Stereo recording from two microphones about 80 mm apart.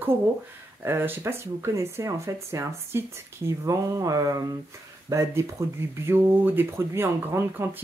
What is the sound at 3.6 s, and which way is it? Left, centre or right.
Speech, right.